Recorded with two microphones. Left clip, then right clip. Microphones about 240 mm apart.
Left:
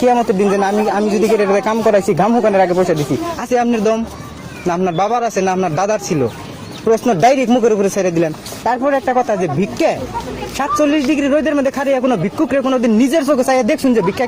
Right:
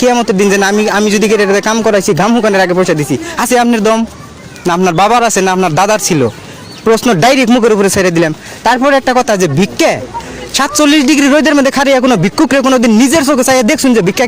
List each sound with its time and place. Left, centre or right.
0.0 s speech: right